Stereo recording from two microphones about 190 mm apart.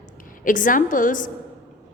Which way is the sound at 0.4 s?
45° left (ahead or behind).